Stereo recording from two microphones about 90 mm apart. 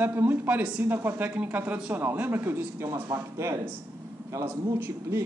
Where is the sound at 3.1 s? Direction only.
35° right (ahead or behind).